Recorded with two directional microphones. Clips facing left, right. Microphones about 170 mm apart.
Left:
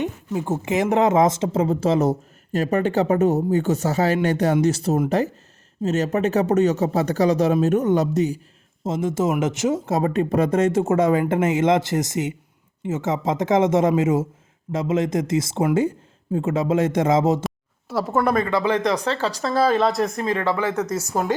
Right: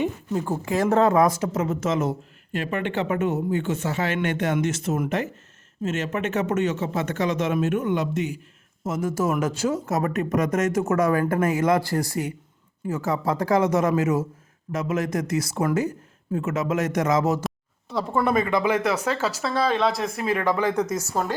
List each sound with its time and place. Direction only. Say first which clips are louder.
0.4 s speech: left 2 dB; 20° left (ahead or behind); by 8.4 s 40° left (ahead or behind)
8.8 s speech: left 3 dB; 25° left (ahead or behind)
17.4 s speech: left 2 dB; 5° left (ahead or behind)
18.4 s speech: left 2 dB; 15° right (ahead or behind)
20.9 s speech: left 2 dB; 10° left (ahead or behind)